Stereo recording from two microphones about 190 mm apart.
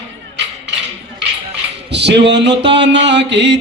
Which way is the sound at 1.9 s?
65° right (ahead or behind).